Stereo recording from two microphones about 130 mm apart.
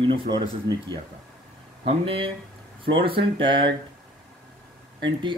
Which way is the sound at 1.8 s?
45° right (ahead or behind).